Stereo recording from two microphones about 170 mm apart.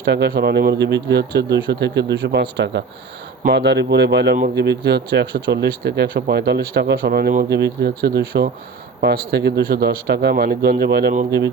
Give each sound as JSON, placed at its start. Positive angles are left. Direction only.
{"t": 0.0, "sound": "speech", "side_deg": -75}
{"t": 11.3, "sound": "speech", "side_deg": -90}